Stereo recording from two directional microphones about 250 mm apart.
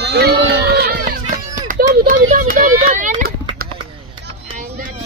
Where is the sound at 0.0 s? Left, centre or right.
Right.